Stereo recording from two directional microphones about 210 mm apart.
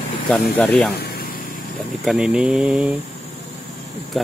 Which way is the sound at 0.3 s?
5° left (ahead or behind).